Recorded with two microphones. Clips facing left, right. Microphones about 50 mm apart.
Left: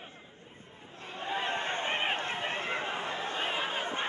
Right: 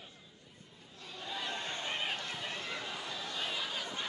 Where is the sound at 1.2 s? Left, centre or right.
Left.